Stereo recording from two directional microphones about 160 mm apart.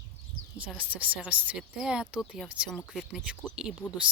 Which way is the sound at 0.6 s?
10° right (ahead or behind).